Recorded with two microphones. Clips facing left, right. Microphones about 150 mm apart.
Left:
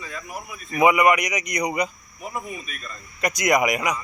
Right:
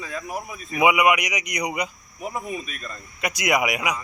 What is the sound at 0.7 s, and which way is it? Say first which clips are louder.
Speech: left 1 dB; 10° right (ahead or behind).